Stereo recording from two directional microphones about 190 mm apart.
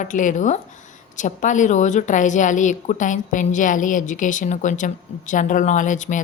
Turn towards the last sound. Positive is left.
turn(degrees=40)  # may be behind; listen again after turning